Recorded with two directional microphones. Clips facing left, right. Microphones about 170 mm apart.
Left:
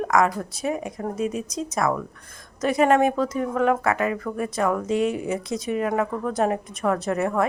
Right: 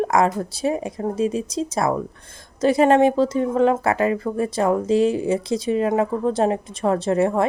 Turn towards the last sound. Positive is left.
turn(degrees=-30)  # may be behind; listen again after turning